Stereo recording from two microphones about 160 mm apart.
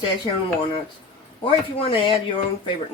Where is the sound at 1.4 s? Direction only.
35° left (ahead or behind).